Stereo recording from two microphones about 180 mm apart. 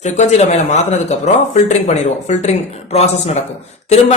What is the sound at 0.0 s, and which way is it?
Speech, 40° left (ahead or behind).